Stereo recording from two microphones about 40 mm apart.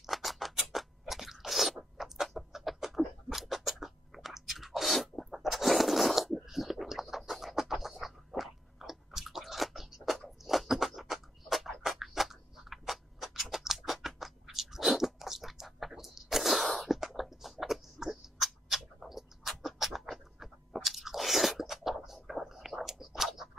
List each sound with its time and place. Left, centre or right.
0.0 s scissors: centre
0.6 s a sound: centre
2.0 s rodents: centre
2.2 s a sound: centre
6.4 s bird: centre
16.0 s sneeze: centre
19.0 s rodents: centre
22.5 s whispering: centre